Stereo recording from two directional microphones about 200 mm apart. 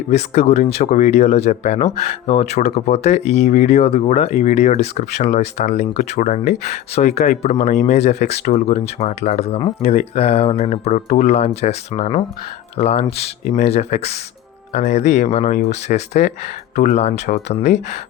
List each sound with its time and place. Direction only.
0.1 s speech: 30° left (ahead or behind)